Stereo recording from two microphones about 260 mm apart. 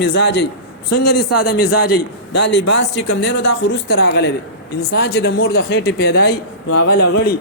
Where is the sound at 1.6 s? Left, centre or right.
Left.